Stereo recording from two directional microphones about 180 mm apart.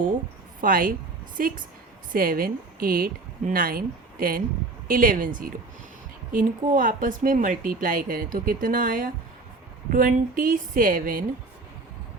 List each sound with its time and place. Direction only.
0.6 s a woman's voice: 50° right (ahead or behind)
6.3 s a woman's voice: 50° right (ahead or behind)